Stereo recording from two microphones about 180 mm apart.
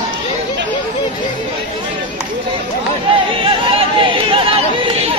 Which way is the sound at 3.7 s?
30° right (ahead or behind).